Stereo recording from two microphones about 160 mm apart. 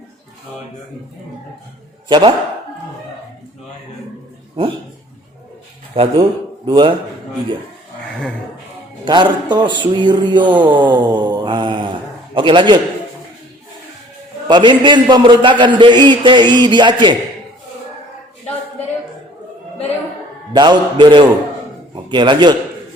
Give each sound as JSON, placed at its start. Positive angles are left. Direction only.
{"t": 2.0, "sound": "a man's voice", "side_deg": -30}
{"t": 5.9, "sound": "a man's voice", "side_deg": -35}
{"t": 9.0, "sound": "a man's voice", "side_deg": -30}
{"t": 14.4, "sound": "a man's voice", "side_deg": -30}
{"t": 20.5, "sound": "a man's voice", "side_deg": -30}